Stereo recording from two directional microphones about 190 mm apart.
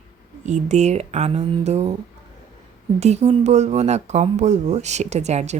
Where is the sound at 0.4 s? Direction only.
40° right (ahead or behind).